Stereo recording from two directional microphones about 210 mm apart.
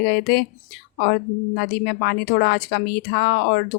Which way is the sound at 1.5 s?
50° left (ahead or behind).